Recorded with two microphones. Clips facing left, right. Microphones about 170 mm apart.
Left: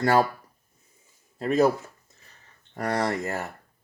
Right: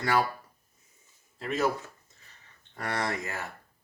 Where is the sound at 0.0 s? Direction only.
45° left (ahead or behind).